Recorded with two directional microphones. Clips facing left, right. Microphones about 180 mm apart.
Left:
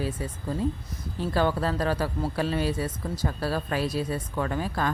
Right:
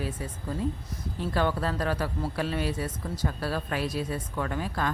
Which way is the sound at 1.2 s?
35° left (ahead or behind).